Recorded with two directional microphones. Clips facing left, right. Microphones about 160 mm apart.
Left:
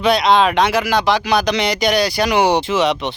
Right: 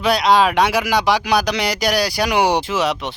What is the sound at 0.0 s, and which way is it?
Speech, 5° right (ahead or behind).